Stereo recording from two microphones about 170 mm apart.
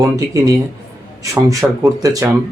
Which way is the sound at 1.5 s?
20° right (ahead or behind).